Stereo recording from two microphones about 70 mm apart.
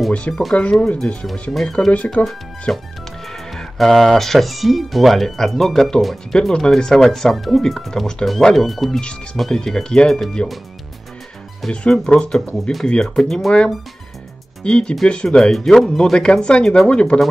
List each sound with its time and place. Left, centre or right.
0.3 s speech: centre
0.6 s speech: centre
1.5 s speech: centre
2.2 s speech: left
2.7 s speech: centre
11.7 s speech: centre
14.6 s speech: centre